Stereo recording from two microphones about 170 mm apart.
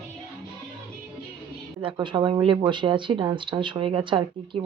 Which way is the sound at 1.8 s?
30° right (ahead or behind).